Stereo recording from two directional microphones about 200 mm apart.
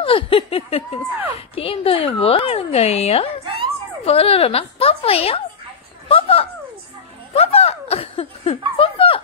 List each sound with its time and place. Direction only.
0.0 s speech: 25° left (ahead or behind)